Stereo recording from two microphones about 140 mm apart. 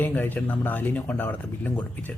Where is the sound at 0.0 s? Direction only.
15° left (ahead or behind).